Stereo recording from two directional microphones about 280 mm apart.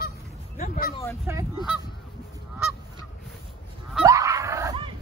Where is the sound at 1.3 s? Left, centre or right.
Centre.